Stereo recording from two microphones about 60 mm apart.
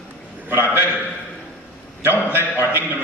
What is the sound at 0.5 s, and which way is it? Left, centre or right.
Speech, right.